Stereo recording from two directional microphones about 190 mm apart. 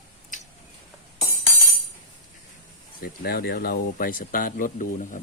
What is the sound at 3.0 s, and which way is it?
Speech, 55° left (ahead or behind).